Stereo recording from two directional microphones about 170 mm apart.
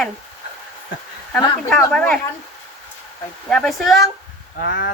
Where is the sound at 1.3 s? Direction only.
5° left (ahead or behind).